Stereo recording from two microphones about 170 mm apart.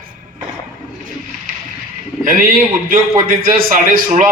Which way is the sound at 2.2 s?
55° right (ahead or behind).